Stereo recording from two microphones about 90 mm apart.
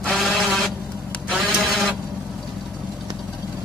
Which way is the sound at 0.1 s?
Centre (ahead or behind).